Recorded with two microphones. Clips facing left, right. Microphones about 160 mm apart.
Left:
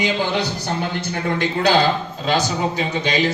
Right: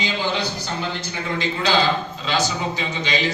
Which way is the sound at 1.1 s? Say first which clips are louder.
Left 6 dB; 60° left (ahead or behind).